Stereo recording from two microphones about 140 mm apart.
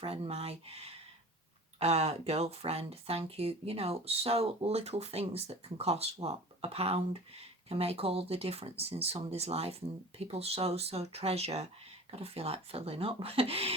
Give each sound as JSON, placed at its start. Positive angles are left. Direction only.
{"t": 0.0, "sound": "speech", "side_deg": -45}